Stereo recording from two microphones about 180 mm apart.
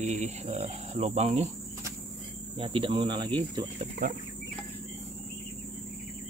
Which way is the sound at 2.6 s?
30° right (ahead or behind).